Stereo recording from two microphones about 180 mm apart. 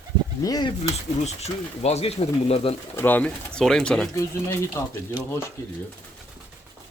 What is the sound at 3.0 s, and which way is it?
Speech, 10° left (ahead or behind).